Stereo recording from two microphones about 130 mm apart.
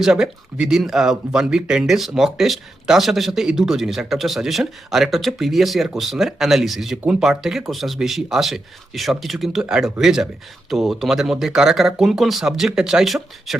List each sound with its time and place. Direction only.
0.0 s speech: 5° right (ahead or behind)